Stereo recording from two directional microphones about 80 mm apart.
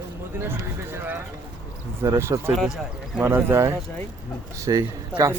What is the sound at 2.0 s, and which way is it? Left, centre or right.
A man's voice, right.